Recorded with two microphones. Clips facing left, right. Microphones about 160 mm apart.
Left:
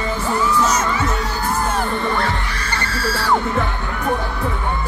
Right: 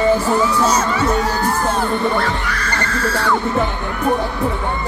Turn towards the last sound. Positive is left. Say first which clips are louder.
# right 2 dB
turn(degrees=30)  # may be behind; listen again after turning